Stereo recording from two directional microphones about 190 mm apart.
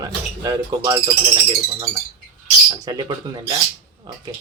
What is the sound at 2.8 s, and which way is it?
Speech, 20° right (ahead or behind).